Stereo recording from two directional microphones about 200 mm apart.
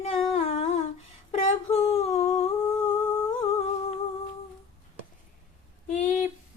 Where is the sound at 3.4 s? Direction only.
30° left (ahead or behind).